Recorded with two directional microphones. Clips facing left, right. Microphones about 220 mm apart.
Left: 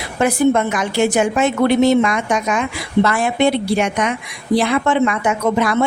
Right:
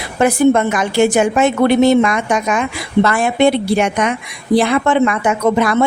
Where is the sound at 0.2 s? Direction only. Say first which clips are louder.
Right 3 dB; 50° right (ahead or behind).